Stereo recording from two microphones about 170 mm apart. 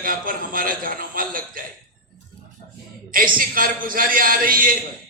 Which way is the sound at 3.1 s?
55° right (ahead or behind).